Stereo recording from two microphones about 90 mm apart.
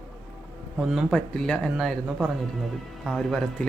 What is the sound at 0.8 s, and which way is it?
Speech, 5° right (ahead or behind).